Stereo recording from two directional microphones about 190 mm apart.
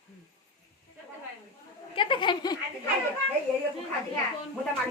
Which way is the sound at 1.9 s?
25° left (ahead or behind).